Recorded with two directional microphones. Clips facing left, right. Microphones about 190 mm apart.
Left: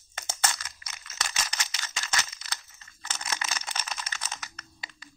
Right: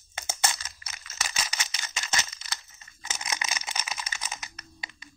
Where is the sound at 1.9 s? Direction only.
20° right (ahead or behind).